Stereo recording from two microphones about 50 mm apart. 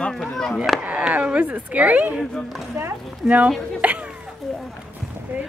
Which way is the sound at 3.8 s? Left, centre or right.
Right.